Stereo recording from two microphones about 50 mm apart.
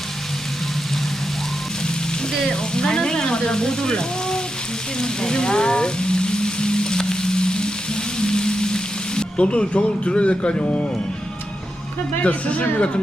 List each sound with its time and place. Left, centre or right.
2.5 s speech: centre
4.9 s frying: centre
12.2 s speech: left